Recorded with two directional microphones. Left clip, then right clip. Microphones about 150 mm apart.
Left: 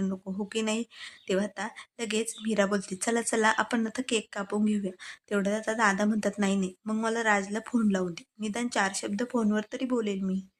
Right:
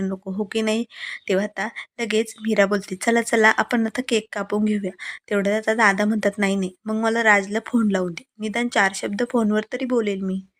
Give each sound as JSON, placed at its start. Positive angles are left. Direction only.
{"t": 0.1, "sound": "speech", "side_deg": -25}